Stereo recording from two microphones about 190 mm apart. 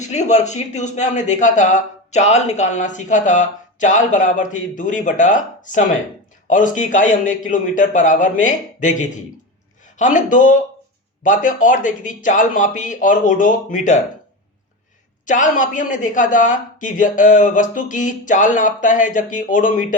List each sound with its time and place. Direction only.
0.0 s a woman's voice: 35° left (ahead or behind)
15.3 s a woman's voice: 40° left (ahead or behind)